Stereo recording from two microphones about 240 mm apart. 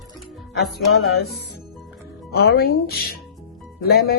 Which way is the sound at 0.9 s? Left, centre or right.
Left.